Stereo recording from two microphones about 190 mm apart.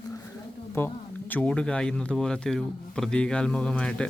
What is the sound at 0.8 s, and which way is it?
Speech, 10° left (ahead or behind).